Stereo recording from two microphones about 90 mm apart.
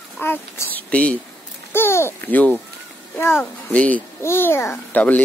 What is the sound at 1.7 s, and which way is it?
Speech, 25° left (ahead or behind).